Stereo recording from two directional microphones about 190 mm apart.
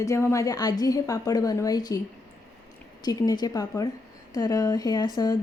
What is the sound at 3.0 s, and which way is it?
Speech, 20° left (ahead or behind).